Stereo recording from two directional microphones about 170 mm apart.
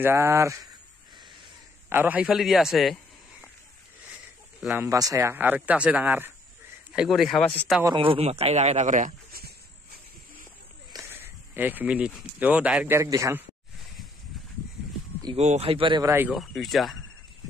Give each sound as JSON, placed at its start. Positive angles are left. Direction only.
{"t": 0.0, "sound": "speech", "side_deg": -15}
{"t": 1.9, "sound": "a man's voice", "side_deg": -10}
{"t": 4.6, "sound": "speech", "side_deg": -5}
{"t": 4.8, "sound": "speech", "side_deg": -20}
{"t": 7.9, "sound": "a man's voice", "side_deg": -30}
{"t": 10.9, "sound": "speech", "side_deg": -15}
{"t": 15.3, "sound": "a man's voice", "side_deg": -40}
{"t": 16.3, "sound": "speech", "side_deg": 0}